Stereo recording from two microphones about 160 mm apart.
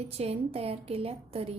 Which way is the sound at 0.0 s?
40° right (ahead or behind).